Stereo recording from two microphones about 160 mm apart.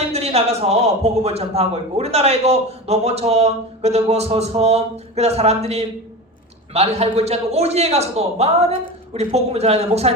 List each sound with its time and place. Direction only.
0.1 s a man's voice: 40° right (ahead or behind)